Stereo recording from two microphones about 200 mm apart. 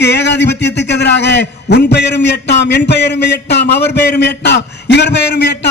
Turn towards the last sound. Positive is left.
turn(degrees=60)  # may be behind; listen again after turning